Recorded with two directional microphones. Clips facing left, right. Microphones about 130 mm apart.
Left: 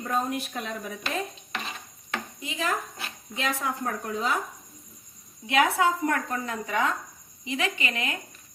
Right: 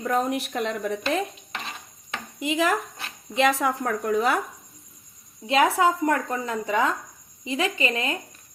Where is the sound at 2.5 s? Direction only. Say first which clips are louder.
Right 7 dB; 85° right.